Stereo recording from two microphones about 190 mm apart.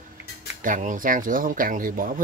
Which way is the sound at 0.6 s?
45° right (ahead or behind).